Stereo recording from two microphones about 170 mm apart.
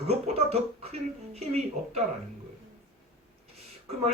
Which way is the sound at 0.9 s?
40° right (ahead or behind).